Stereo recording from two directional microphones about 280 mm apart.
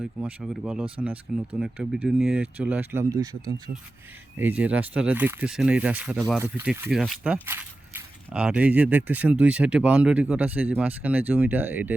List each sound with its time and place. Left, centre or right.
0.0 s speech: centre
4.4 s speech: centre